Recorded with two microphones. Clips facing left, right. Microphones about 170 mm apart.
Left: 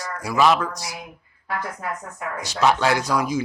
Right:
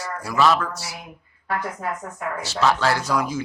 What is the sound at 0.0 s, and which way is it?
Speech, 15° left (ahead or behind).